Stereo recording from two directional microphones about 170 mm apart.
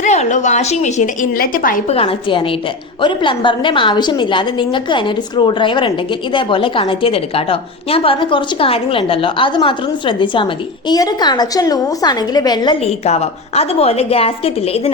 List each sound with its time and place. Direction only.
0.0 s a woman's voice: 45° left (ahead or behind)
1.9 s a woman's voice: 35° left (ahead or behind)
12.8 s a woman's voice: 40° left (ahead or behind)